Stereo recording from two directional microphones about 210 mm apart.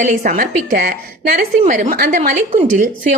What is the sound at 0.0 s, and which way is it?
A woman's voice, 45° right (ahead or behind).